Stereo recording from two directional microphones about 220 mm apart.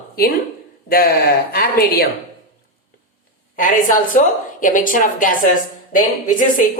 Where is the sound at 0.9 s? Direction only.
40° left (ahead or behind).